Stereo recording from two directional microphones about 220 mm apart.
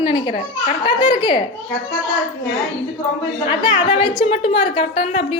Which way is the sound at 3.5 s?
20° left (ahead or behind).